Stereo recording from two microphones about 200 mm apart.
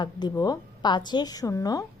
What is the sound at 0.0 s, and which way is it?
A woman's voice, 20° left (ahead or behind).